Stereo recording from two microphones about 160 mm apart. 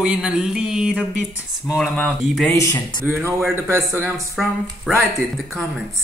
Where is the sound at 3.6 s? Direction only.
15° right (ahead or behind).